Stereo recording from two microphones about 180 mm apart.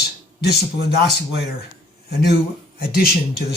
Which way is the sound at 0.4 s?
60° left (ahead or behind).